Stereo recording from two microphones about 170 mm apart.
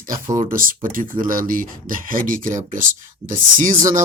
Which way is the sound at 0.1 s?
50° right (ahead or behind).